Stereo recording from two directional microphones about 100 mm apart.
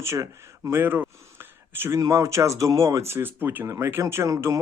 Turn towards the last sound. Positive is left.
turn(degrees=-30)  # may be behind; listen again after turning